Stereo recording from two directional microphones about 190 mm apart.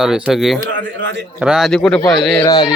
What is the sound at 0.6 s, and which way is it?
Speech, 70° right (ahead or behind).